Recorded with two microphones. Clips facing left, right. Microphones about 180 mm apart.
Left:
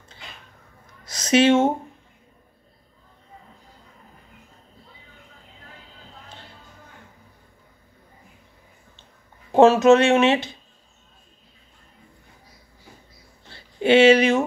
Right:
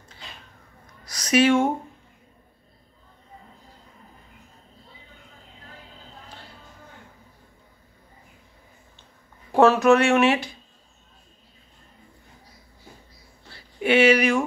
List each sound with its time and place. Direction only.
1.0 s a woman's voice: 25° left (ahead or behind)
9.5 s speech: 20° left (ahead or behind)
13.5 s a sound: 25° left (ahead or behind)